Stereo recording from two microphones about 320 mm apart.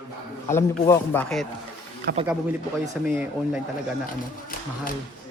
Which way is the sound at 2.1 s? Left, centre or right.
Right.